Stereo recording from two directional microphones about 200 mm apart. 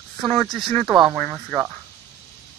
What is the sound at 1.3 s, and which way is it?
Speech, 10° right (ahead or behind).